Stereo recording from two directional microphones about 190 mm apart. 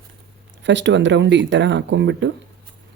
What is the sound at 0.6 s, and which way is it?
Speech, 70° right (ahead or behind).